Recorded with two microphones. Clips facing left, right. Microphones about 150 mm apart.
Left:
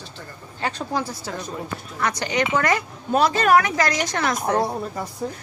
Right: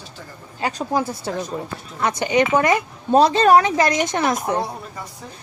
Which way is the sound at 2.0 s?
20° right (ahead or behind).